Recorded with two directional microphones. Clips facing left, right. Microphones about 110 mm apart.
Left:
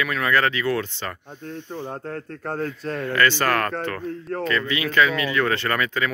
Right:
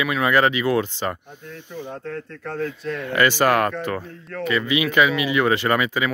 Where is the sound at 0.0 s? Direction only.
15° right (ahead or behind).